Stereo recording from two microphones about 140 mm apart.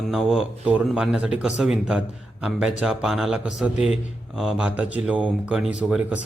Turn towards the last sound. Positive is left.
turn(degrees=-5)  # may be behind; listen again after turning